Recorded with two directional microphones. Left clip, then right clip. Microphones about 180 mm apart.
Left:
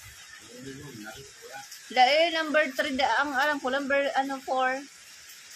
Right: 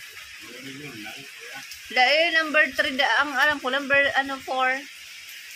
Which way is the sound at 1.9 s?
10° left (ahead or behind).